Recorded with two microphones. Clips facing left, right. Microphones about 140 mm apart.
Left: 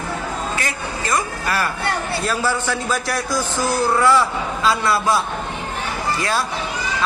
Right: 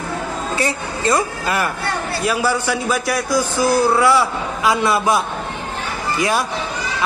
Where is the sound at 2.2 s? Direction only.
10° right (ahead or behind).